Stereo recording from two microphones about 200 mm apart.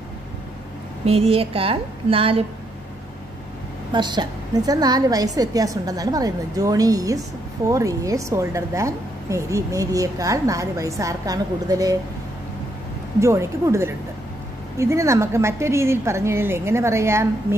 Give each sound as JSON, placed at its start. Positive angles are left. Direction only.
{"t": 1.0, "sound": "a woman's voice", "side_deg": -30}
{"t": 3.9, "sound": "a woman's voice", "side_deg": -20}
{"t": 13.2, "sound": "a woman's voice", "side_deg": -15}